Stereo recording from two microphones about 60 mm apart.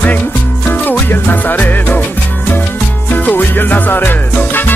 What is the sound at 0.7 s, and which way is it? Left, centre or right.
Music, left.